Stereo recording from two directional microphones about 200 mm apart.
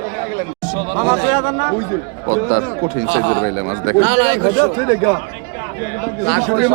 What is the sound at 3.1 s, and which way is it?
Speech, 80° right.